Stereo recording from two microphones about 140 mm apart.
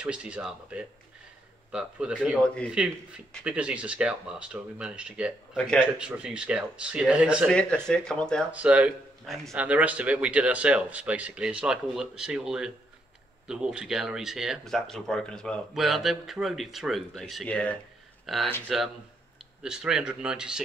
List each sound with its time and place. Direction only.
0.0 s speech: 5° right (ahead or behind)
2.4 s speech: 10° left (ahead or behind)
3.4 s speech: 10° right (ahead or behind)
5.6 s speech: 5° left (ahead or behind)
5.9 s speech: 5° right (ahead or behind)
7.4 s speech: 5° left (ahead or behind)
8.5 s speech: 10° right (ahead or behind)